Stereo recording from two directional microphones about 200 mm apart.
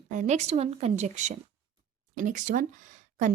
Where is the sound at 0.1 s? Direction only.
35° right (ahead or behind).